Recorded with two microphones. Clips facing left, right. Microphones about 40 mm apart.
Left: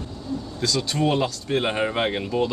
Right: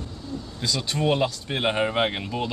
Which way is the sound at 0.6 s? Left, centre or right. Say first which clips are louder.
Left 1 dB; centre.